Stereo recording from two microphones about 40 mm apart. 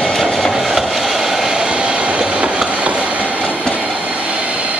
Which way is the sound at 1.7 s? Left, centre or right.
Right.